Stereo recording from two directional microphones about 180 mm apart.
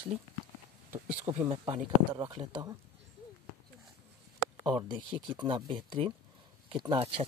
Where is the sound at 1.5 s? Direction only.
30° right (ahead or behind).